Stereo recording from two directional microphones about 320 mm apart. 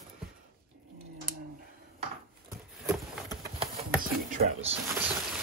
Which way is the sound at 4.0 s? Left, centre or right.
Right.